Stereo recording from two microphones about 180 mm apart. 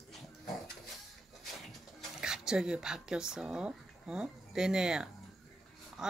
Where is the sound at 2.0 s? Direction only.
5° right (ahead or behind).